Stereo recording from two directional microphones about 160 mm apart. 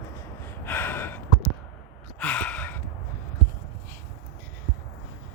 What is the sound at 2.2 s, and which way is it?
Gasp, 10° left (ahead or behind).